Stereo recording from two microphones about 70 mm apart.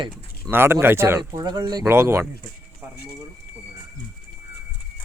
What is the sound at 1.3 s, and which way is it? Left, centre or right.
Speech, right.